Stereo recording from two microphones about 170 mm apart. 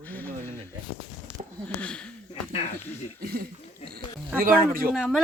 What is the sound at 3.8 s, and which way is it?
Speech, 40° left (ahead or behind).